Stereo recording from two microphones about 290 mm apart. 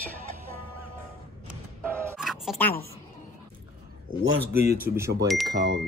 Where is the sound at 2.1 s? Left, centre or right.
Centre.